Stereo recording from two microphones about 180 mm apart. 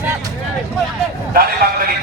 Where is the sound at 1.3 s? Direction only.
55° right (ahead or behind).